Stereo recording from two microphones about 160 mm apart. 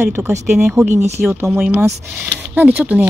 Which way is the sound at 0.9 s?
45° right (ahead or behind).